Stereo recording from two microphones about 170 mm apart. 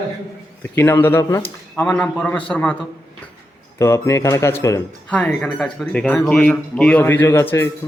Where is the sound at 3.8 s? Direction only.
15° left (ahead or behind).